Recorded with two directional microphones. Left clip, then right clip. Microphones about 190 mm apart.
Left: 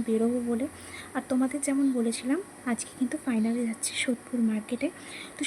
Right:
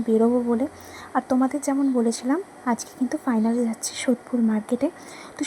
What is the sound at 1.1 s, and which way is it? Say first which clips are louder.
A woman's voice: right 7 dB; 5° right (ahead or behind).